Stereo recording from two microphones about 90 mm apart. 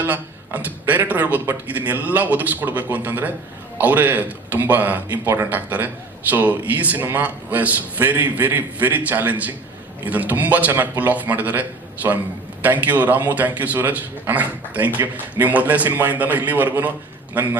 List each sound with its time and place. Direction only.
0.0 s a man's voice: 20° right (ahead or behind)
12.6 s a man's voice: 20° right (ahead or behind)